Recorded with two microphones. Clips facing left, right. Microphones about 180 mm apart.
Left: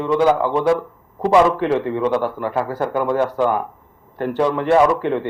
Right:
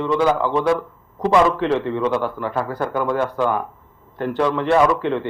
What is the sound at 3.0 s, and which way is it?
Speech, 40° left (ahead or behind).